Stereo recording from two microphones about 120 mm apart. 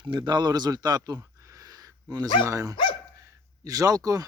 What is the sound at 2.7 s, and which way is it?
Dog, 45° left (ahead or behind).